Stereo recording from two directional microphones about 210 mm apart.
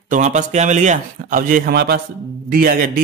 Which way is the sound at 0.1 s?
35° right (ahead or behind).